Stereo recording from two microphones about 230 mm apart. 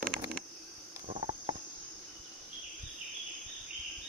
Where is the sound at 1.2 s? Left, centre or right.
Right.